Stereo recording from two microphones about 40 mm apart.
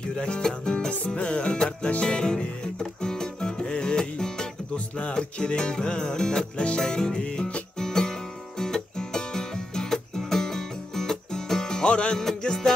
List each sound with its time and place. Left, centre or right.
0.0 s music: left
4.7 s music: left
5.1 s music: centre
7.8 s music: centre
12.2 s music: centre